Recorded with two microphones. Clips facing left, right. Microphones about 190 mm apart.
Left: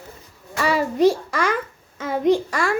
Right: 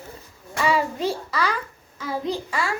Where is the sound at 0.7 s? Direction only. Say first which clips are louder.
Left 7 dB; 45° left (ahead or behind).